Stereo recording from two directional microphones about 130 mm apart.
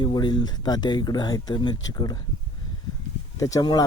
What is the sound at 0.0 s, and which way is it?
Speech, 35° left (ahead or behind).